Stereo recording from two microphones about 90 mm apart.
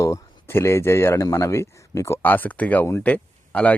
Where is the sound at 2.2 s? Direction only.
20° left (ahead or behind).